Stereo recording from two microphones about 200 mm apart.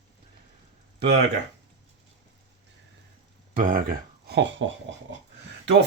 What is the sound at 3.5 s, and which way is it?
Speech, 45° right (ahead or behind).